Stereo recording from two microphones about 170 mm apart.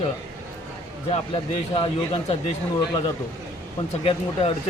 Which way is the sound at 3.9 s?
35° left (ahead or behind).